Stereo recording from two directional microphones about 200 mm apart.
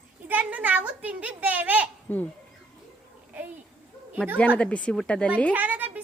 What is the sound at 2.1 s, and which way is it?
Speech, 10° left (ahead or behind).